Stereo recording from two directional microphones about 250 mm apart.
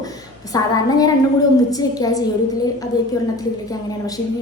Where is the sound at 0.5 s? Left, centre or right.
Centre.